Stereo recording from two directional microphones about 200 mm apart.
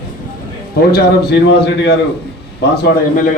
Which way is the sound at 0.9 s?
55° left (ahead or behind).